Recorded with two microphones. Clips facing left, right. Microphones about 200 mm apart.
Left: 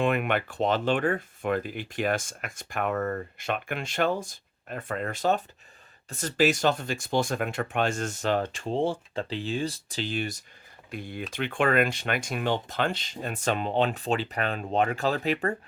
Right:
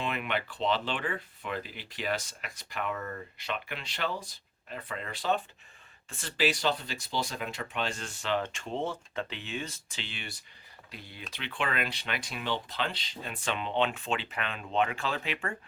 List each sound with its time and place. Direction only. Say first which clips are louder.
0.0 s speech: left 8 dB; 50° left (ahead or behind)